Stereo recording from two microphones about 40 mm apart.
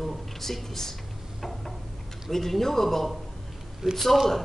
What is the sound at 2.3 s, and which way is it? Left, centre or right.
Speech, centre.